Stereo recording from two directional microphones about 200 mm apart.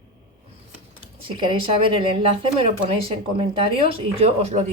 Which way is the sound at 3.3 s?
30° right (ahead or behind).